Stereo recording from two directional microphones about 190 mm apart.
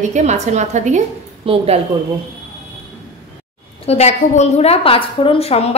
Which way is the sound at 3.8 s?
35° left (ahead or behind).